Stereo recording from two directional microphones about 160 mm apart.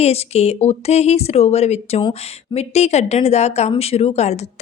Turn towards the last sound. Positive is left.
turn(degrees=45)  # may be behind; listen again after turning